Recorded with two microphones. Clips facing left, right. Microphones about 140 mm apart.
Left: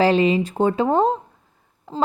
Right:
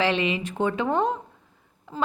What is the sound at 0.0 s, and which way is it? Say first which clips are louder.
A woman's voice: left 7 dB; 40° left (ahead or behind).